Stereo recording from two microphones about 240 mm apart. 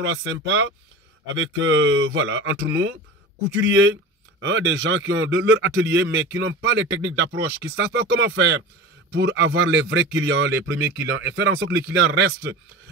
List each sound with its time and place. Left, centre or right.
0.0 s a man's voice: right
10.8 s speech: centre
11.1 s a man's voice: right